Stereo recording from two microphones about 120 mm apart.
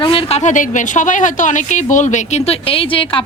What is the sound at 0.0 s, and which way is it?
A woman's voice, 50° left (ahead or behind).